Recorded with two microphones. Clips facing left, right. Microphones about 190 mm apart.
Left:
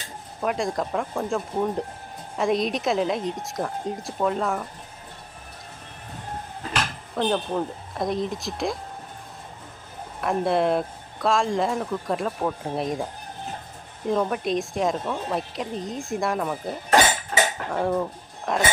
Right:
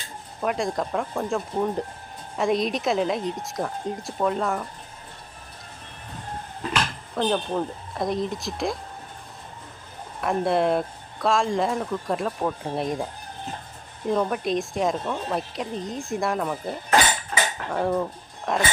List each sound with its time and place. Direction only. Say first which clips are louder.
0.4 s speech: even; centre (ahead or behind)
7.2 s speech: even; centre (ahead or behind)
10.2 s speech: even; centre (ahead or behind)
14.1 s speech: even; centre (ahead or behind)
16.9 s cutlery: left 2 dB; 40° left (ahead or behind)
17.7 s speech: even; centre (ahead or behind)